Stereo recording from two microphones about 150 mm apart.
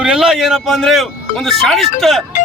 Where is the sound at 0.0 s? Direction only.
5° right (ahead or behind).